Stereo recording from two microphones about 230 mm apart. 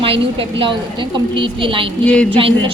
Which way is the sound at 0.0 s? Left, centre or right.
Right.